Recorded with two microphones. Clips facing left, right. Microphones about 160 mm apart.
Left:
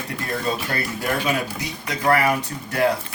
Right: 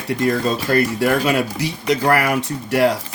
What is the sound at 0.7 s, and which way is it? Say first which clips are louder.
Speech: right 8 dB; 90° right.